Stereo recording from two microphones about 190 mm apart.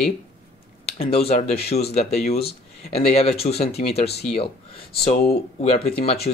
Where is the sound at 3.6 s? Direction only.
55° left (ahead or behind).